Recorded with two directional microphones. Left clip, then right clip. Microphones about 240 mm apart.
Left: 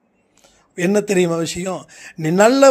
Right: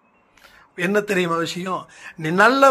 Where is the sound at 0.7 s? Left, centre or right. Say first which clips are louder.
Left 3 dB; left.